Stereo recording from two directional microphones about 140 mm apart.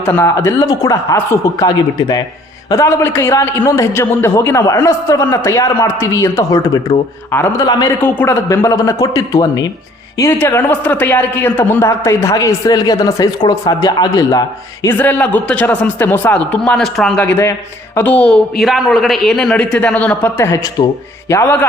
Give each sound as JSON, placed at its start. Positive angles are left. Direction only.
{"t": 0.0, "sound": "a man's voice", "side_deg": 15}
{"t": 7.6, "sound": "a man's voice", "side_deg": 30}
{"t": 8.0, "sound": "a man's voice", "side_deg": 15}
{"t": 10.2, "sound": "a man's voice", "side_deg": 15}
{"t": 14.8, "sound": "a man's voice", "side_deg": 10}
{"t": 17.2, "sound": "a man's voice", "side_deg": 20}
{"t": 18.5, "sound": "a man's voice", "side_deg": 0}